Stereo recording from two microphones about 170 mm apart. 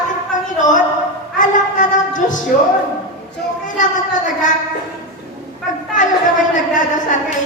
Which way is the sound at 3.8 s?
45° left (ahead or behind).